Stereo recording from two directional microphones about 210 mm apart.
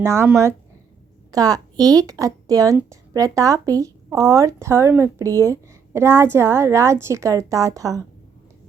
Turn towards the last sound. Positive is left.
turn(degrees=-15)  # may be behind; listen again after turning